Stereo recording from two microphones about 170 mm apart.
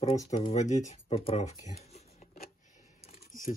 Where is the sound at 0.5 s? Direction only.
45° left (ahead or behind).